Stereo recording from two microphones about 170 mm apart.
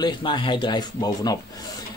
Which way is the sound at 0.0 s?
30° left (ahead or behind).